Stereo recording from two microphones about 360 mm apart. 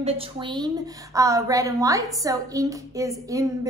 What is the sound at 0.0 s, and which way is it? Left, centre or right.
A woman's voice, centre.